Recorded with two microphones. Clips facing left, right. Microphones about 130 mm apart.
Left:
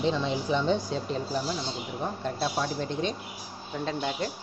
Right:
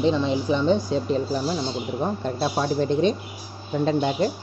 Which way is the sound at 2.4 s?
30° right (ahead or behind).